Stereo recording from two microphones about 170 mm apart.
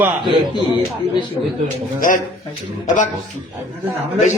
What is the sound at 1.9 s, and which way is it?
Speech, 50° left (ahead or behind).